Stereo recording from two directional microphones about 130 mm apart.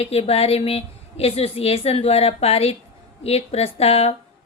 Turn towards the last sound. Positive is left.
turn(degrees=50)  # may be behind; listen again after turning